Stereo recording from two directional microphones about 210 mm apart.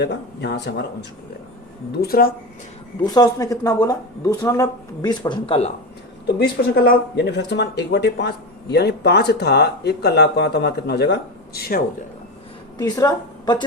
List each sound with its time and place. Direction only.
0.0 s speech: 50° left (ahead or behind)
1.9 s speech: 45° left (ahead or behind)
3.1 s speech: 20° left (ahead or behind)
6.4 s speech: 50° left (ahead or behind)
12.7 s a woman's voice: 20° left (ahead or behind)